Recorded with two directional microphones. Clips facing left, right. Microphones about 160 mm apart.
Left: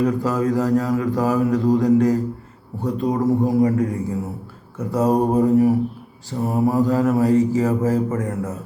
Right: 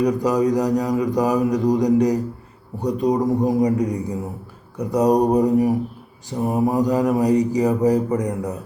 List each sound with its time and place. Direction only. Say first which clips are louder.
0.0 s a man's voice: right 2 dB; 15° right (ahead or behind)